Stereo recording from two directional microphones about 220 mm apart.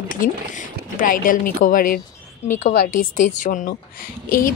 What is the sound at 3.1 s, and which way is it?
Speech, 35° left (ahead or behind).